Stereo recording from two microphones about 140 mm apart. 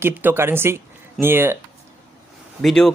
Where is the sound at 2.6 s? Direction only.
Centre (ahead or behind).